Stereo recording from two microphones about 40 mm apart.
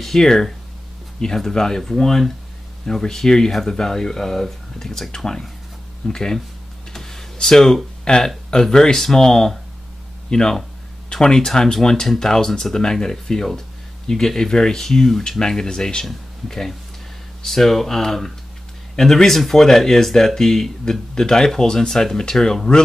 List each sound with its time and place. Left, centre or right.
0.0 s speech: centre
6.9 s a sound: centre
7.3 s speech: centre